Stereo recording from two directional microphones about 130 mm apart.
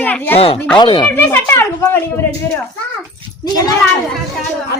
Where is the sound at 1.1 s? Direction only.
15° left (ahead or behind).